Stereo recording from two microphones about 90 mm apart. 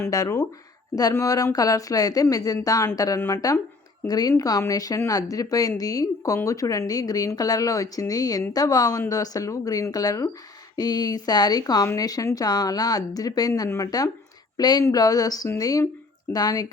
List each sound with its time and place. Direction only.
0.1 s speech: 40° left (ahead or behind)
3.2 s speech: 30° left (ahead or behind)
4.0 s a woman's voice: 45° left (ahead or behind)